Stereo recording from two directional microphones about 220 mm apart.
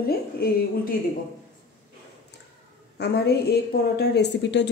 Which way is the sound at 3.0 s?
50° left (ahead or behind).